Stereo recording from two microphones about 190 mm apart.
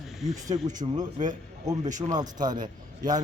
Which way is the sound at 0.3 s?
20° right (ahead or behind).